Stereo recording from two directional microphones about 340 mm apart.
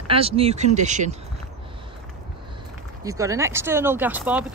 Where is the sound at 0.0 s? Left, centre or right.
Centre.